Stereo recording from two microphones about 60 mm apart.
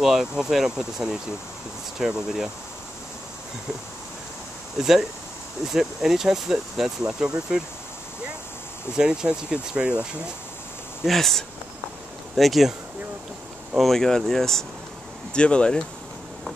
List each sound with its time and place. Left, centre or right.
0.0 s speech: centre
4.7 s speech: centre
8.9 s speech: centre
11.1 s speech: centre
13.7 s speech: centre
15.3 s speech: centre